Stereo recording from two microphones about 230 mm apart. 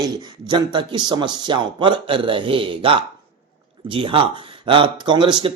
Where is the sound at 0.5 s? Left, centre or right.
Right.